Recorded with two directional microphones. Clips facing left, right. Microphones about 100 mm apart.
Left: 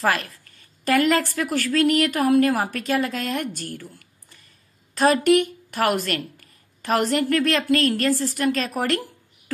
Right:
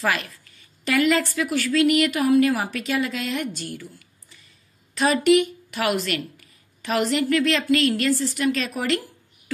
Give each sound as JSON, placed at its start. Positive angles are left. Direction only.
{"t": 0.0, "sound": "a woman's voice", "side_deg": 50}
{"t": 3.7, "sound": "a sound", "side_deg": 50}
{"t": 4.9, "sound": "a woman's voice", "side_deg": 50}